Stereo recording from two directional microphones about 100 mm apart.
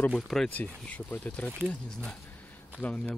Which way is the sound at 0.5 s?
15° left (ahead or behind).